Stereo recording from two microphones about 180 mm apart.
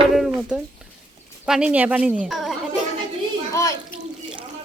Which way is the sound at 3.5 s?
15° left (ahead or behind).